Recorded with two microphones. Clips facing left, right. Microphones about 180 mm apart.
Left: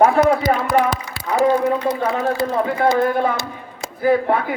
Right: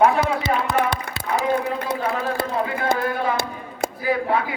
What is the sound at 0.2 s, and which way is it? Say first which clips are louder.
Speech: left 8 dB; 45° left (ahead or behind).